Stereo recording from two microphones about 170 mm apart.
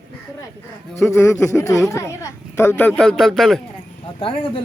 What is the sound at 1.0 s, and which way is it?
A woman's voice, 15° left (ahead or behind).